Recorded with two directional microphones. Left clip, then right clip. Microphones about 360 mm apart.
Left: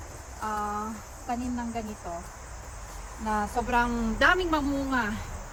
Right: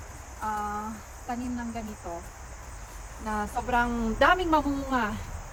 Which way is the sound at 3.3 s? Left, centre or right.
Centre.